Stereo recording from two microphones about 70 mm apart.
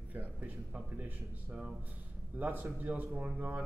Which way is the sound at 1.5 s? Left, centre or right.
Centre.